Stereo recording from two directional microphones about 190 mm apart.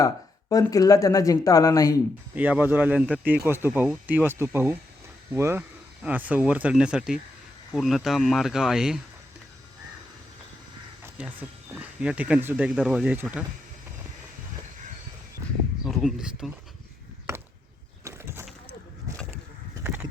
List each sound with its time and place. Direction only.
0.0 s speech: 15° left (ahead or behind)
2.3 s speech: 10° right (ahead or behind)
11.0 s speech: 10° right (ahead or behind)
15.9 s speech: centre (ahead or behind)
18.0 s a sound: 15° right (ahead or behind)
19.8 s vehicle: 10° right (ahead or behind)